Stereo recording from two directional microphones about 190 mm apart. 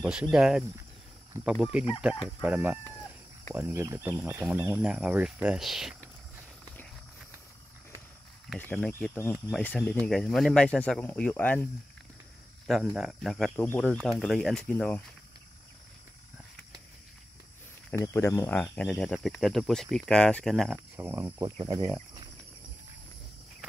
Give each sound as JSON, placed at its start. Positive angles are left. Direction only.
{"t": 0.0, "sound": "speech", "side_deg": -5}
{"t": 8.5, "sound": "speech", "side_deg": 5}
{"t": 12.6, "sound": "speech", "side_deg": 0}
{"t": 17.9, "sound": "speech", "side_deg": 15}
{"t": 20.7, "sound": "speech", "side_deg": -10}